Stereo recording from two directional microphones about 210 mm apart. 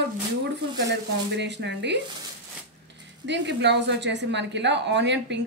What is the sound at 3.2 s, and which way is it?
A woman's voice, 55° right (ahead or behind).